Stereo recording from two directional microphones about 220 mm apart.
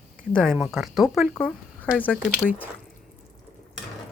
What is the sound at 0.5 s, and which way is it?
Speech, centre (ahead or behind).